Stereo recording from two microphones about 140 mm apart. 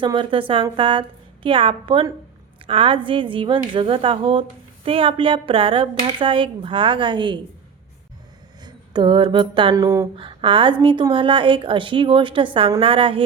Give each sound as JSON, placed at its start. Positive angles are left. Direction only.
{"t": 0.0, "sound": "a woman's voice", "side_deg": -35}
{"t": 8.6, "sound": "a sound", "side_deg": -30}
{"t": 9.7, "sound": "speech", "side_deg": -25}
{"t": 10.2, "sound": "a woman's voice", "side_deg": -35}